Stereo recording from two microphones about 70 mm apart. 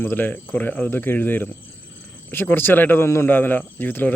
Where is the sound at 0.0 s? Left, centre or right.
Left.